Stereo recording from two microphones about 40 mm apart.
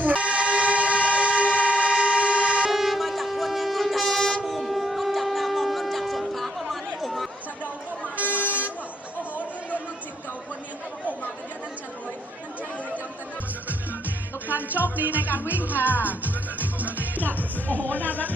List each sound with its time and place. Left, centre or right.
0.0 s vehicle: right
2.6 s train: centre
4.4 s shofar: centre
8.3 s vehicle: left
9.4 s music: left
14.4 s music: right
17.2 s music: left